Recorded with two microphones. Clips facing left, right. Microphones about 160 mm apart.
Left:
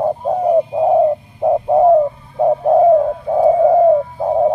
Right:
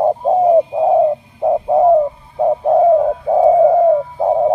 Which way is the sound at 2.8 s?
15° right (ahead or behind).